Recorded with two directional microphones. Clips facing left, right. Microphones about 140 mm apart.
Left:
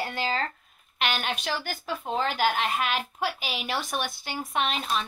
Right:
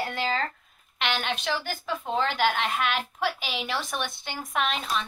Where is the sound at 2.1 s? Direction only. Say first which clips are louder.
Even; 40° left (ahead or behind).